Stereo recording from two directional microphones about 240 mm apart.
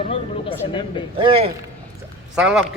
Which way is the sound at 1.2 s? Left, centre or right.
Right.